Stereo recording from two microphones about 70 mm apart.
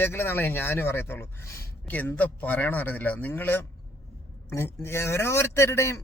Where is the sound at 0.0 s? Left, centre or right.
Left.